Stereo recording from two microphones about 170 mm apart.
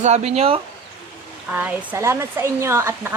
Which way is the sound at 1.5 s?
10° right (ahead or behind).